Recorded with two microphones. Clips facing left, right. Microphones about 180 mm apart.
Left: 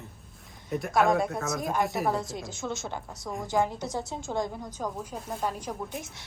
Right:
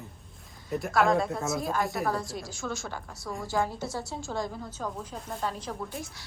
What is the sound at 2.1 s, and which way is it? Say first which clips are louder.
A woman's voice: left 1 dB; 20° left (ahead or behind).